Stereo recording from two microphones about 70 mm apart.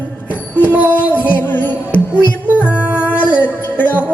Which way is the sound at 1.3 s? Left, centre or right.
Left.